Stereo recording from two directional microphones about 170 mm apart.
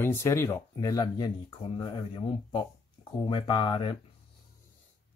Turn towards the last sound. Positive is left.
turn(degrees=30)  # may be behind; listen again after turning